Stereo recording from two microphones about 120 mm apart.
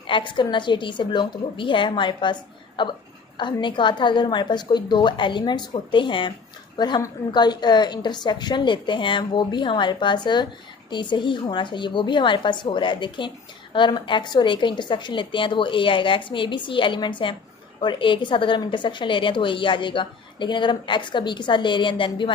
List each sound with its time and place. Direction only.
0.1 s a woman's voice: 40° left (ahead or behind)